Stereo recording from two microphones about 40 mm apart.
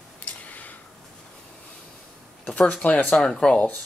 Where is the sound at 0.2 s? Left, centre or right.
Left.